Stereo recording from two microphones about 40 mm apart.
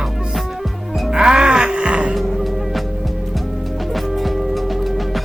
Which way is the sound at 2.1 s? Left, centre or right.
Centre.